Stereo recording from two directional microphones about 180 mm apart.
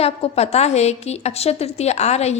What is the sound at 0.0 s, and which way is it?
A woman's voice, 35° left (ahead or behind).